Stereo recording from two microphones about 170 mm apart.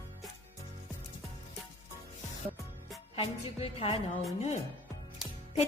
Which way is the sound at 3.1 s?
35° left (ahead or behind).